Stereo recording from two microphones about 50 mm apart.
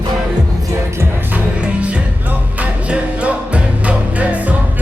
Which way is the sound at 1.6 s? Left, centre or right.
Right.